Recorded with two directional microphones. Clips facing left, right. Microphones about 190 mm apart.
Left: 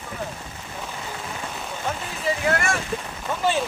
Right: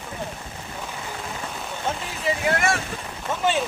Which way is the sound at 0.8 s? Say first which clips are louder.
Left 1 dB; centre (ahead or behind).